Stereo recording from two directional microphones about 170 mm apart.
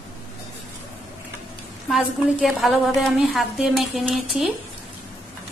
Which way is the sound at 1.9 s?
Centre (ahead or behind).